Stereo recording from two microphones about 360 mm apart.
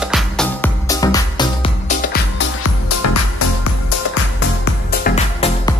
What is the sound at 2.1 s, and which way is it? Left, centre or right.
Music, left.